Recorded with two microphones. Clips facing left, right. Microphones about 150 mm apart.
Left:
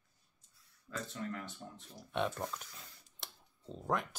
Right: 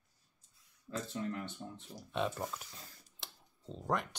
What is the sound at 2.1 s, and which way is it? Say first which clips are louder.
Speech: even; centre (ahead or behind).